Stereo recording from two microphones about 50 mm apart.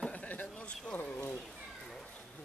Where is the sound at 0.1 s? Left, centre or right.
Left.